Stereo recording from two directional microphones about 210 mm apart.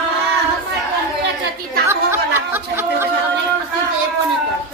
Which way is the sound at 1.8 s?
10° right (ahead or behind).